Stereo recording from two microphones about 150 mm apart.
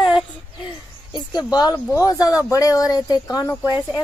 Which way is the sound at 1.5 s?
25° left (ahead or behind).